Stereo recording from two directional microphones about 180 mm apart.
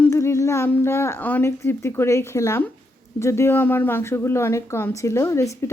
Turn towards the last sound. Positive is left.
turn(degrees=15)  # may be behind; listen again after turning